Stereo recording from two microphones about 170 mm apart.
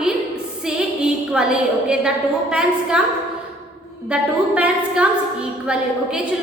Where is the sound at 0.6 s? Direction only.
5° right (ahead or behind).